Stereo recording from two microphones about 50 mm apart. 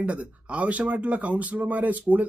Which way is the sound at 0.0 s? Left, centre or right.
Right.